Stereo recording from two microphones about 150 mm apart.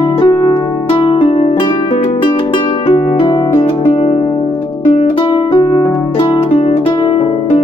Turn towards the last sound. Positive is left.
turn(degrees=35)  # may be behind; listen again after turning